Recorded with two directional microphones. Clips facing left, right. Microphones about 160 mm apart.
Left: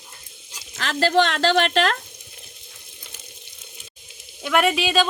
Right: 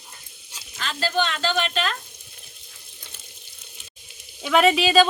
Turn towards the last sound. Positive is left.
turn(degrees=0)  # may be behind; listen again after turning